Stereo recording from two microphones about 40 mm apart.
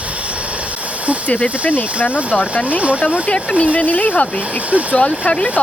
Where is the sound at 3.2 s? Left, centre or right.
Left.